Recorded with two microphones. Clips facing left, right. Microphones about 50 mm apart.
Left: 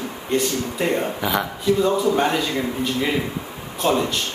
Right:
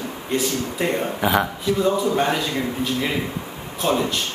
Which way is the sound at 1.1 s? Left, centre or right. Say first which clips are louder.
Right 3 dB; centre.